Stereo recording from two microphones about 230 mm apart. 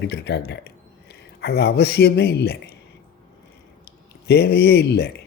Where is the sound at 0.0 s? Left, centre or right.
Left.